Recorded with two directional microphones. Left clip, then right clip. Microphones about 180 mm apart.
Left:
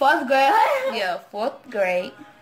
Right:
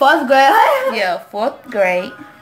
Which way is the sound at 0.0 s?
20° right (ahead or behind).